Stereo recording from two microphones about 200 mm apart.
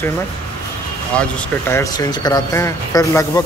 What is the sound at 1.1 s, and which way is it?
Speech, 10° left (ahead or behind).